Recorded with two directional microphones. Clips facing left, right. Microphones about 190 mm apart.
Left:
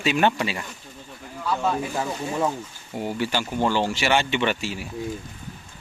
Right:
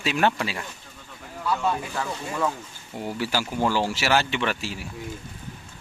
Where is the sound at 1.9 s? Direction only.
20° left (ahead or behind).